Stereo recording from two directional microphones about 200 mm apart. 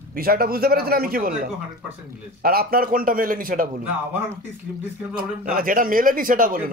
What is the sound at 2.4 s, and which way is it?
A man's voice, 50° right (ahead or behind).